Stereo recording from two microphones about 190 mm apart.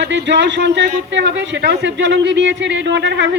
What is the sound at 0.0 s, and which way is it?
A man's voice, 70° right (ahead or behind).